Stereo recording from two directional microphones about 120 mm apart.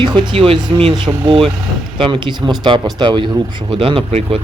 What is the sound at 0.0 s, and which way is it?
Speech, 40° right (ahead or behind).